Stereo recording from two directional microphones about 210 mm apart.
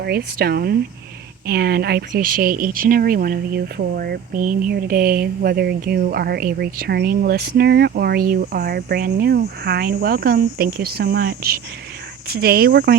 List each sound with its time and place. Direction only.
0.0 s speech: 50° right (ahead or behind)